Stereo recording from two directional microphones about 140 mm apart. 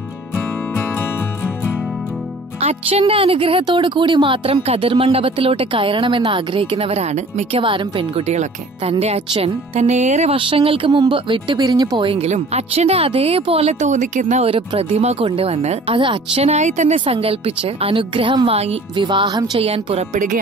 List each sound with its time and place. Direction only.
2.6 s speech: 45° right (ahead or behind)
7.6 s speech: 35° right (ahead or behind)
8.3 s speech: 50° right (ahead or behind)
9.8 s speech: 55° right (ahead or behind)
10.3 s speech: 35° right (ahead or behind); by 14.5 s 55° right (ahead or behind)
14.5 s speech: 40° right (ahead or behind)
16.0 s speech: 35° right (ahead or behind)
16.4 s speech: 55° right (ahead or behind)
17.0 s speech: 45° right (ahead or behind)
19.6 s speech: 45° right (ahead or behind)